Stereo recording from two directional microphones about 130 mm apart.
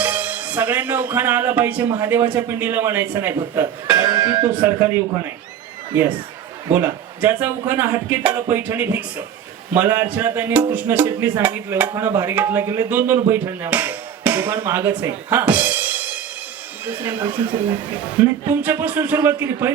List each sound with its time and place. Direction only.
0.0 s a man's voice: 10° right (ahead or behind)
18.4 s speech: 15° right (ahead or behind)